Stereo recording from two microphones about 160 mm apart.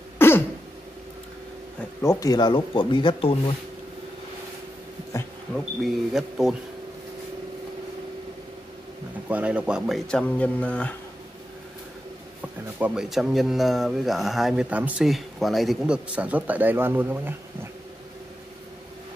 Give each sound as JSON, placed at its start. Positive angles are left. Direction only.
{"t": 0.2, "sound": "throat clearing", "side_deg": 15}
{"t": 1.8, "sound": "speech", "side_deg": 10}
{"t": 2.1, "sound": "speech", "side_deg": 25}
{"t": 5.8, "sound": "speech", "side_deg": 0}
{"t": 9.3, "sound": "speech", "side_deg": -10}
{"t": 12.4, "sound": "speech", "side_deg": -10}